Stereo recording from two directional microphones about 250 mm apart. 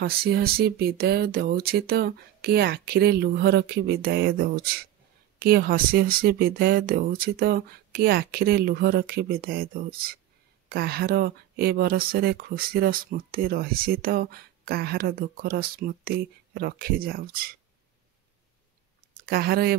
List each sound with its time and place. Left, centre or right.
0.0 s speech: right
19.2 s speech: right